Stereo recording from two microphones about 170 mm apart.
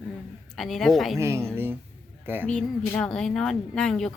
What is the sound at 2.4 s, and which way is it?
Speech, 5° left (ahead or behind).